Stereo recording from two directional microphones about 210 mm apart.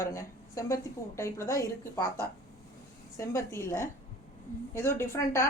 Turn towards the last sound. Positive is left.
turn(degrees=10)  # may be behind; listen again after turning